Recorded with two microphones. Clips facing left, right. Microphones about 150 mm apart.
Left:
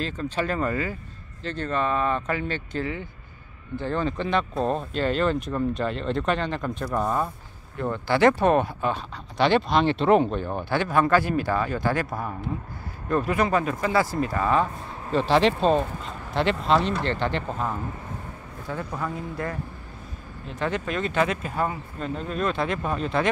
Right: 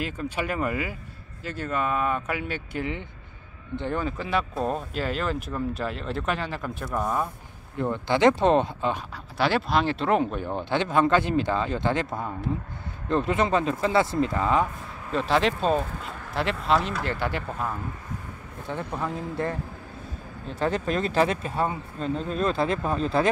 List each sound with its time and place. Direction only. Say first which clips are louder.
0.0 s speech: left 2 dB; 10° right (ahead or behind)
4.0 s speech: left 2 dB; 5° right (ahead or behind)
7.7 s speech: even; 20° right (ahead or behind)
9.1 s speech: left 6 dB; 5° right (ahead or behind)
10.6 s speech: right 1 dB; 20° right (ahead or behind)
13.1 s speech: even; 25° right (ahead or behind)
15.1 s speech: left 3 dB; centre (ahead or behind)
18.7 s speech: even; 25° right (ahead or behind)